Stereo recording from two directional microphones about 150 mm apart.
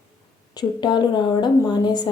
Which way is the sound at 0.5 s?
30° left (ahead or behind).